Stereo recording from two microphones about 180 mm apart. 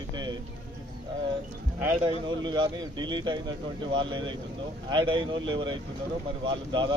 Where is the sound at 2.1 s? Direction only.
25° right (ahead or behind).